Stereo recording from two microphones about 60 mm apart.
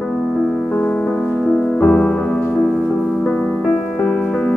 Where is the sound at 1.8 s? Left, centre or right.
Left.